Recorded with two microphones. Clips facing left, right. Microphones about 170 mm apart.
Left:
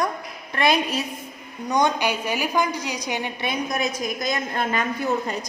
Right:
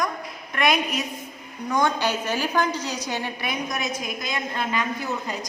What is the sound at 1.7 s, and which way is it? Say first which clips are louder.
A woman's voice: left 1 dB; 15° left (ahead or behind).